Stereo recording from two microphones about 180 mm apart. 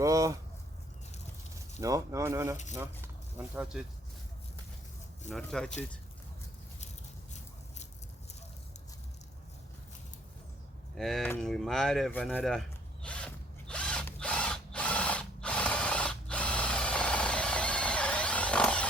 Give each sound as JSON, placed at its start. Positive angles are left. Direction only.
{"t": 0.0, "sound": "speech", "side_deg": -15}
{"t": 1.5, "sound": "speech", "side_deg": -20}
{"t": 5.3, "sound": "speech", "side_deg": 5}
{"t": 10.9, "sound": "speech", "side_deg": 0}
{"t": 12.4, "sound": "mechanisms", "side_deg": 0}